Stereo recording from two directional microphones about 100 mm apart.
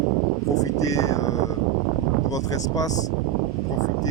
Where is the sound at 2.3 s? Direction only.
35° left (ahead or behind).